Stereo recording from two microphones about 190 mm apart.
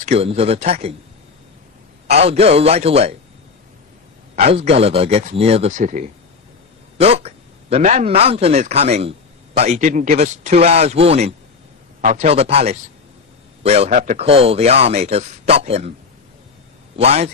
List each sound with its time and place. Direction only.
0.0 s speech: 30° right (ahead or behind)
2.0 s speech: 35° right (ahead or behind)
4.4 s speech: 35° right (ahead or behind)
17.0 s speech: 35° right (ahead or behind)